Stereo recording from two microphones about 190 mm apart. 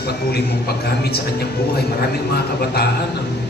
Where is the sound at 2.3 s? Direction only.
55° left (ahead or behind).